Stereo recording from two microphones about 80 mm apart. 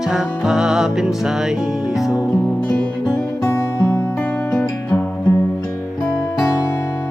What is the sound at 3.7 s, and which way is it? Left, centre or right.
Music, left.